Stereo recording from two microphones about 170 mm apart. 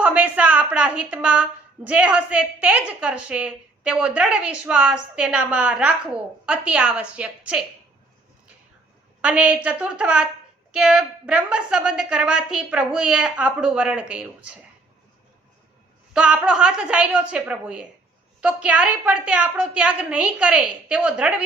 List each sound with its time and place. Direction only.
0.0 s a woman's voice: 10° right (ahead or behind)
9.2 s a woman's voice: 10° right (ahead or behind)
16.1 s a woman's voice: 5° right (ahead or behind)